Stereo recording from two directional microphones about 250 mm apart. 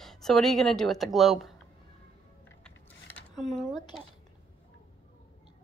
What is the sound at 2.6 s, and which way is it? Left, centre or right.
Mechanisms, centre.